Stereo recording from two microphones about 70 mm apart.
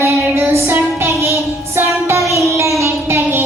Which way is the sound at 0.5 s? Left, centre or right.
Right.